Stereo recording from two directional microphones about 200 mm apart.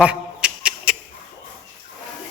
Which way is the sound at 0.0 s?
5° right (ahead or behind).